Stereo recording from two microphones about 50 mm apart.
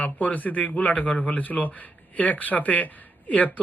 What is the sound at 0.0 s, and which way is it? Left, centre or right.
Speech, left.